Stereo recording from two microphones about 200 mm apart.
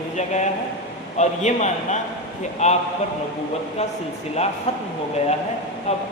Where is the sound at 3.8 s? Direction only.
35° left (ahead or behind).